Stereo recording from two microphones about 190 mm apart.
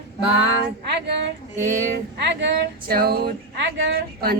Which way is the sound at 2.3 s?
65° right (ahead or behind).